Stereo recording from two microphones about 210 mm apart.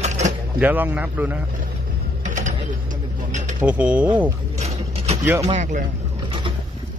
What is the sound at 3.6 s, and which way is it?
Speech, 5° right (ahead or behind).